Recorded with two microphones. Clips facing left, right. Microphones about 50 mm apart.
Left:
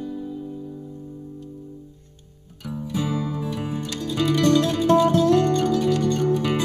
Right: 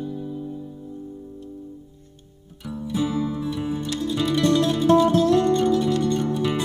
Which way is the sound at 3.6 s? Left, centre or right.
Left.